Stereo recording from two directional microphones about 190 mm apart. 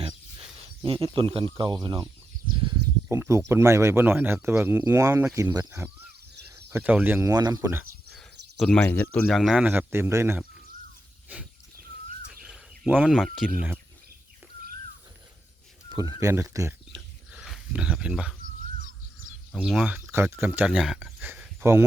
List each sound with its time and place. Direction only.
0.8 s speech: 25° right (ahead or behind)
3.1 s speech: 15° right (ahead or behind)
8.6 s speech: 5° left (ahead or behind); by 10.4 s 15° right (ahead or behind)
12.3 s speech: 5° right (ahead or behind)
15.9 s speech: 20° right (ahead or behind)
16.9 s a sound: centre (ahead or behind)
19.5 s speech: 5° right (ahead or behind)